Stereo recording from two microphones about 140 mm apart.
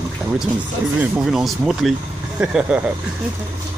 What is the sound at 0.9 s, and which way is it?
Speech, 5° right (ahead or behind).